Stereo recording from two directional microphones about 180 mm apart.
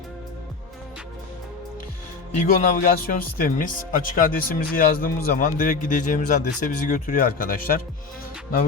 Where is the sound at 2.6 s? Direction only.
50° left (ahead or behind).